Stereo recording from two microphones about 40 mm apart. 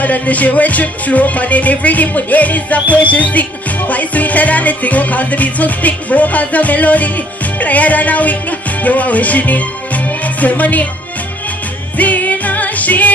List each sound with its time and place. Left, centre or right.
0.0 s music: left
12.0 s music: left